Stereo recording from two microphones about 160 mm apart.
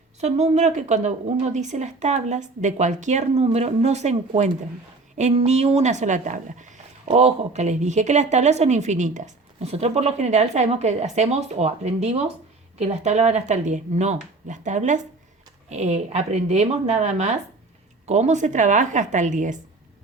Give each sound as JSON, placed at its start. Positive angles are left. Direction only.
{"t": 0.2, "sound": "speech", "side_deg": -45}